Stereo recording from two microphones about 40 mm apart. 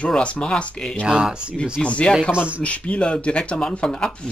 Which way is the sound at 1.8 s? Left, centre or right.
Left.